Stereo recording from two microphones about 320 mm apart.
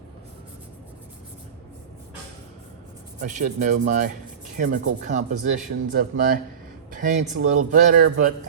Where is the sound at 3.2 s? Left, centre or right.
Right.